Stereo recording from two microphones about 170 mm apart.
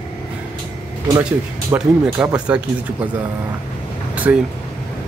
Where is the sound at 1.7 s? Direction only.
10° right (ahead or behind).